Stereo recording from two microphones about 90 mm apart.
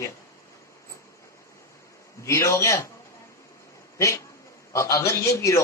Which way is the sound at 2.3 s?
30° left (ahead or behind).